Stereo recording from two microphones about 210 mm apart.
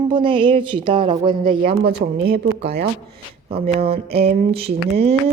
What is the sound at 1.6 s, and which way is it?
A woman's voice, 50° right (ahead or behind).